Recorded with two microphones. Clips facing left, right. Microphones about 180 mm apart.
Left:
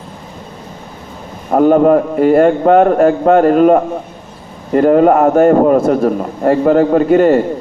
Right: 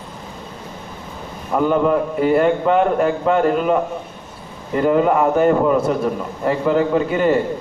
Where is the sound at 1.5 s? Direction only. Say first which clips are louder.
Left 8 dB; 45° left (ahead or behind).